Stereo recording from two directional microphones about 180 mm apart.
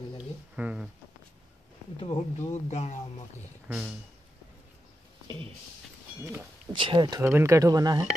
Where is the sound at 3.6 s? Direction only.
5° right (ahead or behind).